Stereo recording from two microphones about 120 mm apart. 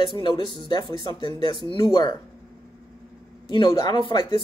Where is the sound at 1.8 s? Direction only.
35° left (ahead or behind).